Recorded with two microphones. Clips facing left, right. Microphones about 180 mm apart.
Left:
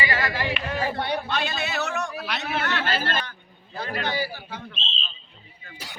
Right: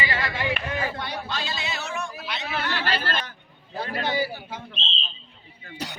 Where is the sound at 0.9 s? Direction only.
60° left (ahead or behind).